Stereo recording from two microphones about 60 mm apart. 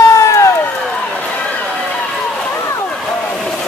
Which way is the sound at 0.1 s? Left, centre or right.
Left.